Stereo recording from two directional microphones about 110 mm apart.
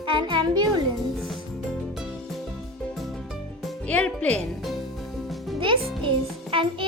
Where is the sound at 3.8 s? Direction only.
15° left (ahead or behind).